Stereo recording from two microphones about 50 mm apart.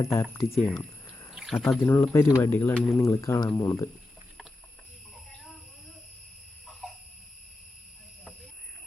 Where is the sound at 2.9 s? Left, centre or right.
Left.